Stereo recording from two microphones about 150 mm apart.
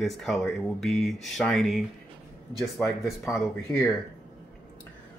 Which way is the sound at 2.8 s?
20° left (ahead or behind).